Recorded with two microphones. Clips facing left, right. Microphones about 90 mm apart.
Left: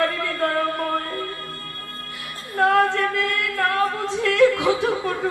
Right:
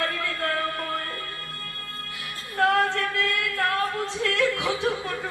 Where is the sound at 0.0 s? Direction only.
35° left (ahead or behind).